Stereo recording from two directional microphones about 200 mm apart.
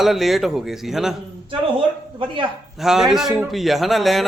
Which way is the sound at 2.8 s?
Centre (ahead or behind).